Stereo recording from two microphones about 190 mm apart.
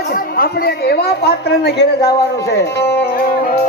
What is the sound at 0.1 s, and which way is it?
A woman's voice, 50° left (ahead or behind).